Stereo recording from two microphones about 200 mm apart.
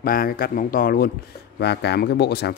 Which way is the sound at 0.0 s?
45° left (ahead or behind).